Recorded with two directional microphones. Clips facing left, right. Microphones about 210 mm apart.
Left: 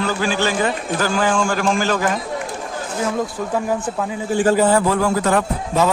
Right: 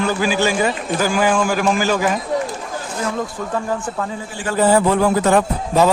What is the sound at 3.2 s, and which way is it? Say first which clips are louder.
Speech: left 2 dB; 10° left (ahead or behind).